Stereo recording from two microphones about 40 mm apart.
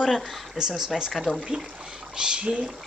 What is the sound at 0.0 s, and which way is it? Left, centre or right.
Speech, centre.